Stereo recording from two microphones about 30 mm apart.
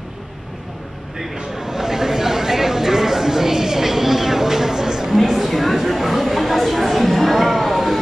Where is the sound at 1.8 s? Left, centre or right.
Centre.